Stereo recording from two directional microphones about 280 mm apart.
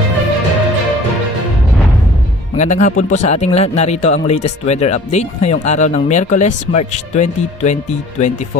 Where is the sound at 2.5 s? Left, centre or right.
Left.